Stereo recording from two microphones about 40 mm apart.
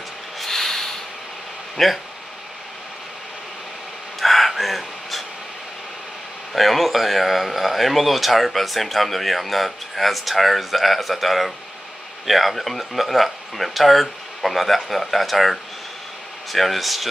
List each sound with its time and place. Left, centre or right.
0.4 s snort: centre
1.8 s speech: centre
4.2 s a sound: centre
6.5 s speech: centre